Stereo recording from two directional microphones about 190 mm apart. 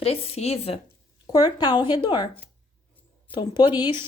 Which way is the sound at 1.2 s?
20° left (ahead or behind).